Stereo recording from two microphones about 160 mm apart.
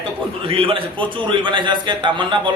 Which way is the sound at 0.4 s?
35° right (ahead or behind).